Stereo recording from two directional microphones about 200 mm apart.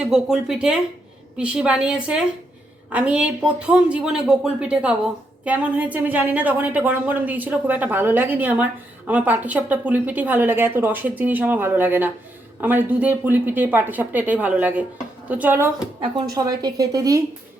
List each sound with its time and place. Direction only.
0.0 s a woman's voice: centre (ahead or behind)
16.0 s a woman's voice: 20° right (ahead or behind)